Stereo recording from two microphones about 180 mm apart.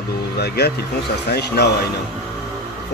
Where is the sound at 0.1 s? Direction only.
65° left (ahead or behind).